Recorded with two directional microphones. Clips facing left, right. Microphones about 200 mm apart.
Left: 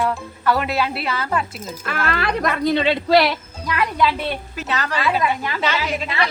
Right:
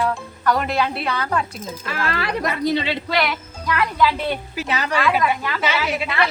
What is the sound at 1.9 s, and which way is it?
Speech, 55° left (ahead or behind).